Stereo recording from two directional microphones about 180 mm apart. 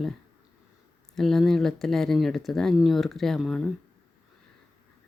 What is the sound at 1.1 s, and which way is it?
Speech, centre (ahead or behind).